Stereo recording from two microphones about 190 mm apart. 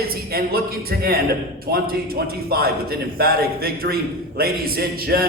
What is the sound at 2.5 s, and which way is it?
A man's voice, 55° right (ahead or behind).